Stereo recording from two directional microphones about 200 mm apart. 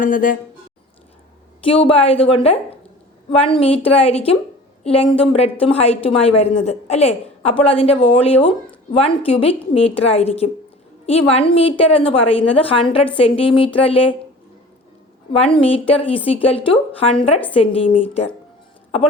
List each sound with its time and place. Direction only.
0.0 s speech: 45° left (ahead or behind)
1.6 s a woman's voice: 25° left (ahead or behind)
15.3 s a woman's voice: 25° left (ahead or behind)